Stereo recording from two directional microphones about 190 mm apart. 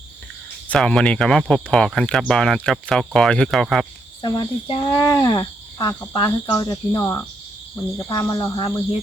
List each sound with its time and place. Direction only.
0.7 s speech: 5° left (ahead or behind)
4.2 s speech: 20° left (ahead or behind)
6.1 s cricket: 20° left (ahead or behind)